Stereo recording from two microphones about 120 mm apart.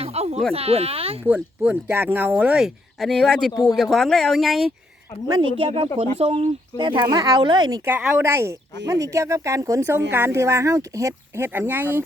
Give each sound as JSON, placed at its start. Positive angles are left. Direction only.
{"t": 0.0, "sound": "a sound", "side_deg": -60}
{"t": 0.5, "sound": "speech", "side_deg": -55}
{"t": 1.2, "sound": "speech", "side_deg": -15}
{"t": 3.5, "sound": "speech", "side_deg": 35}
{"t": 3.8, "sound": "speech", "side_deg": 5}
{"t": 5.5, "sound": "speech", "side_deg": -55}
{"t": 6.7, "sound": "speech", "side_deg": -40}
{"t": 7.9, "sound": "speech", "side_deg": -15}